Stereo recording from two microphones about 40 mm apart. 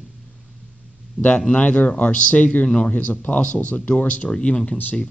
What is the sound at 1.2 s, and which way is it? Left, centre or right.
Speech, right.